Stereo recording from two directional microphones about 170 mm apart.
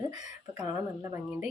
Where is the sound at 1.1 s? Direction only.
10° right (ahead or behind).